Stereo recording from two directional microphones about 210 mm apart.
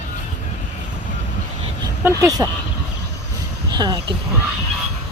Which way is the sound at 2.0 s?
15° right (ahead or behind).